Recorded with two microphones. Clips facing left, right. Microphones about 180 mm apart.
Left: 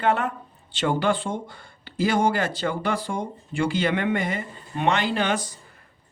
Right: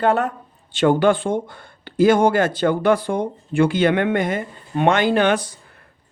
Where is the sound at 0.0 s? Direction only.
40° right (ahead or behind).